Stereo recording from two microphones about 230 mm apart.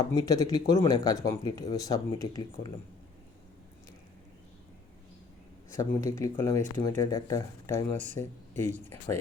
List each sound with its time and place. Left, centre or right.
0.1 s speech: centre
5.7 s speech: centre